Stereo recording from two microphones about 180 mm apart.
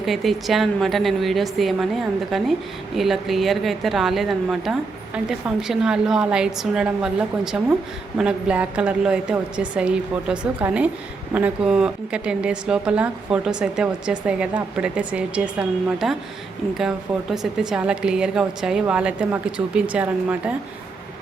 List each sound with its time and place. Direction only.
0.0 s speech: centre (ahead or behind)
2.9 s a woman's voice: centre (ahead or behind)
17.3 s speech: 5° right (ahead or behind)